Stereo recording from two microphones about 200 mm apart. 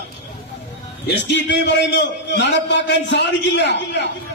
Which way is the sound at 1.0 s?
60° left (ahead or behind).